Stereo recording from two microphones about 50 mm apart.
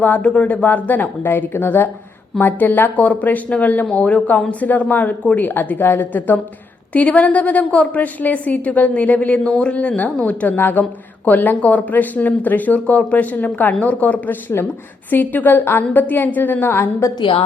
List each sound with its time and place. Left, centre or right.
0.2 s speech: left
1.2 s a woman's voice: left
6.9 s a woman's voice: left
9.5 s speech: centre
9.7 s a woman's voice: left
10.6 s a woman's voice: left
14.5 s speech: left